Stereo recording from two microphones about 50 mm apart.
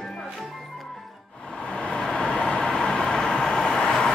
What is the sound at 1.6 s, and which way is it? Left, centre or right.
Vehicle, centre.